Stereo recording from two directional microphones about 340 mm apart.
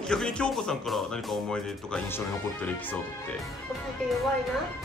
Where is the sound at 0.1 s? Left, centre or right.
Centre.